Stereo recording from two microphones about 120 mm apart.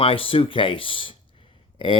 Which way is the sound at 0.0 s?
50° left (ahead or behind).